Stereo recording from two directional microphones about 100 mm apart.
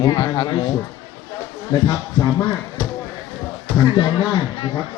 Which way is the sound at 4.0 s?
55° left (ahead or behind).